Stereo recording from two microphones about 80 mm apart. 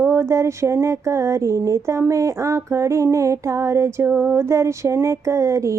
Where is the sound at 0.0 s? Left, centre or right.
Right.